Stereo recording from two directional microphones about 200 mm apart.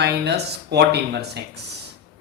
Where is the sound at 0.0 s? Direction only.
55° right (ahead or behind).